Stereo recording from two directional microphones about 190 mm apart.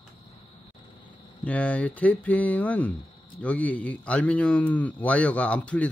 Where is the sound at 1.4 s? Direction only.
5° left (ahead or behind).